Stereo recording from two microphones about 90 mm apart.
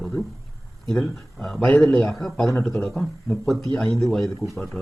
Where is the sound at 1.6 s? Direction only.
15° left (ahead or behind).